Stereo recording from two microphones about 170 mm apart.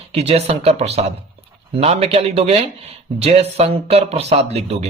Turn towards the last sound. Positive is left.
turn(degrees=-40)  # may be behind; listen again after turning